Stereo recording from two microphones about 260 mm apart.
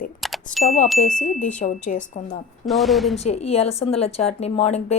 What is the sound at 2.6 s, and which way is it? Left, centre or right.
Speech, centre.